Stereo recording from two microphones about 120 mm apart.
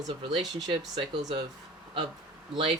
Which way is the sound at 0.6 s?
40° right (ahead or behind).